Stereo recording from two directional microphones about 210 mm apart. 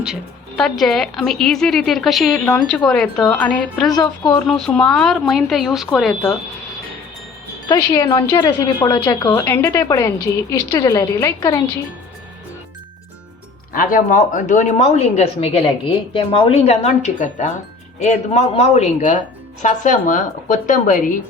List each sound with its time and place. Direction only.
0.0 s speech: centre (ahead or behind)
7.7 s a woman's voice: 20° left (ahead or behind)
13.7 s speech: 40° left (ahead or behind)